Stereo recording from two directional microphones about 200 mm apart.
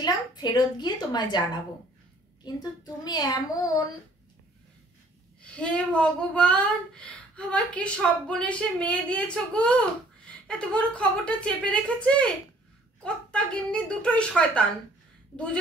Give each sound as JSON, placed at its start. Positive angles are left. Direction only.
{"t": 0.0, "sound": "a woman's voice", "side_deg": 20}
{"t": 5.4, "sound": "speech", "side_deg": 5}